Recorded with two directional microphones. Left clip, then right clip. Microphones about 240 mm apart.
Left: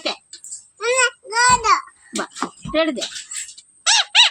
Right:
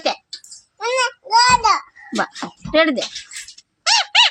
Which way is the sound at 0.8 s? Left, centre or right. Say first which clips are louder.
Left 1 dB; right.